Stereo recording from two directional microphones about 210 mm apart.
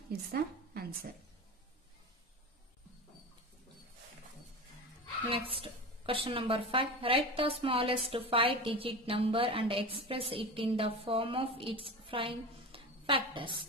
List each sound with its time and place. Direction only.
0.3 s a woman's voice: 45° right (ahead or behind)
5.3 s a woman's voice: 25° right (ahead or behind)